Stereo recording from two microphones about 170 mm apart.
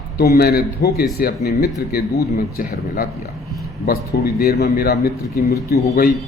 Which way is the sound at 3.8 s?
70° left (ahead or behind).